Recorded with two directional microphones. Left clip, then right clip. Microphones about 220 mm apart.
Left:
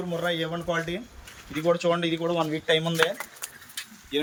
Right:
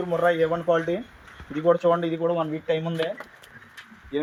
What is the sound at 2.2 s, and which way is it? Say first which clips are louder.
Speech: right 1 dB; 5° right (ahead or behind).